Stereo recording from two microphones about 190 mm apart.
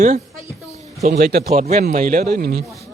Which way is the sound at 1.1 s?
60° right (ahead or behind).